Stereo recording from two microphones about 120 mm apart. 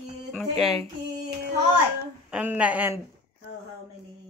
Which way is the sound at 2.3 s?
15° right (ahead or behind).